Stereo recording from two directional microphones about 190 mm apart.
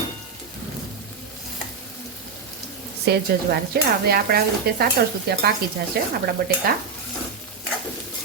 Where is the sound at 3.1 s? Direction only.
60° right (ahead or behind).